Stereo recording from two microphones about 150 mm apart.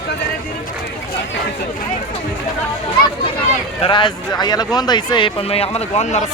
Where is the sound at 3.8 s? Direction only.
30° left (ahead or behind); by 6.3 s 50° left (ahead or behind).